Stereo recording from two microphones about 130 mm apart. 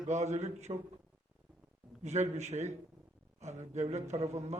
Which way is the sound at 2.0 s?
65° right (ahead or behind).